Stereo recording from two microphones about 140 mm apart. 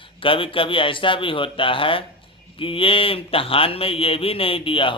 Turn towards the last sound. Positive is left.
turn(degrees=40)  # may be behind; listen again after turning